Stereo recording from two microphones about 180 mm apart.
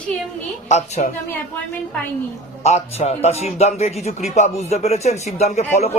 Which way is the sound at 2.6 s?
35° left (ahead or behind).